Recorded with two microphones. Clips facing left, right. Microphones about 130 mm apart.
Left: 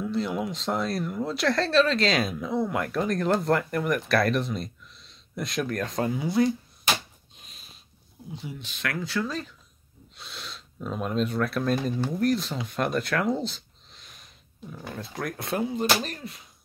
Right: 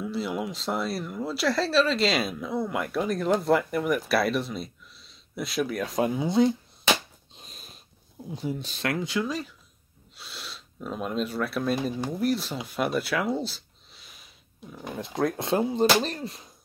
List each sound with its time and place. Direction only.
0.0 s speech: 5° right (ahead or behind); by 6.5 s 20° right (ahead or behind)
7.3 s sniff: 35° right (ahead or behind)
8.4 s speech: 40° right (ahead or behind)
8.8 s speech: 20° right (ahead or behind)
12.6 s a sound: 5° right (ahead or behind)
14.9 s speech: 20° right (ahead or behind)